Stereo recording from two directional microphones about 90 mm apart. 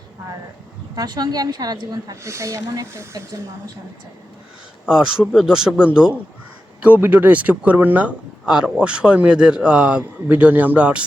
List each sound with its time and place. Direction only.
0.9 s a woman's voice: 50° right (ahead or behind)
2.2 s speech: 35° right (ahead or behind)
4.9 s speech: 10° right (ahead or behind)